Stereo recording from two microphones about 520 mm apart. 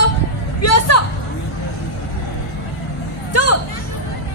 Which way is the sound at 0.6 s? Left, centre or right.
Left.